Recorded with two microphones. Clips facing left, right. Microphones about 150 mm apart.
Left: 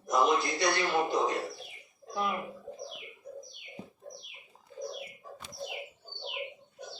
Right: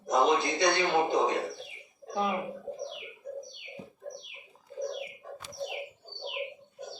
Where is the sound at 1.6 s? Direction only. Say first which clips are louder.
Right 4 dB; 25° right (ahead or behind).